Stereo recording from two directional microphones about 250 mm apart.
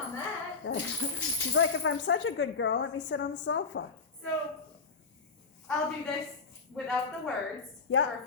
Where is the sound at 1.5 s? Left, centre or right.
Left.